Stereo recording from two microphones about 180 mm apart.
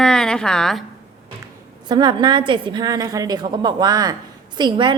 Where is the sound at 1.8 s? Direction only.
25° right (ahead or behind).